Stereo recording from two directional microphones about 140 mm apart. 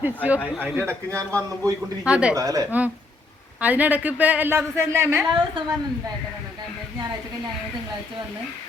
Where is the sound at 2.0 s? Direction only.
5° right (ahead or behind).